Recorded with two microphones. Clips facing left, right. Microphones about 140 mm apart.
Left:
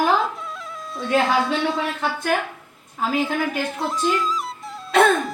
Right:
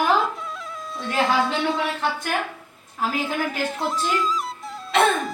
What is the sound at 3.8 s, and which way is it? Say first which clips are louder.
Speech: left 2 dB; centre (ahead or behind).